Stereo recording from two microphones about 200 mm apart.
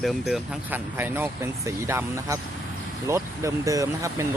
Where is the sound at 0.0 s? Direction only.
5° right (ahead or behind).